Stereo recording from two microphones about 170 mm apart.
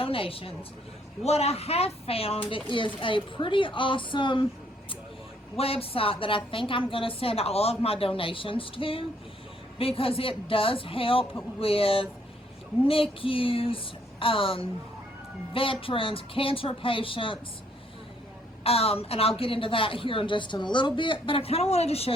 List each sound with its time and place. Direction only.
0.0 s a woman's voice: 35° left (ahead or behind)
5.5 s a woman's voice: 35° left (ahead or behind)
18.6 s a woman's voice: 35° left (ahead or behind)